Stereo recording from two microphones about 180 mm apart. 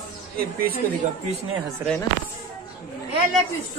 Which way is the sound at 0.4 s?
55° right (ahead or behind).